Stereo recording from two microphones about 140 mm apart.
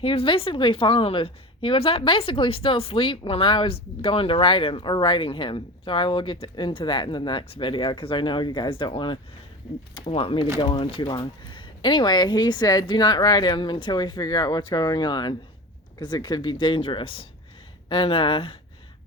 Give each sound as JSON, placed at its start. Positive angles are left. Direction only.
{"t": 0.0, "sound": "a woman's voice", "side_deg": 40}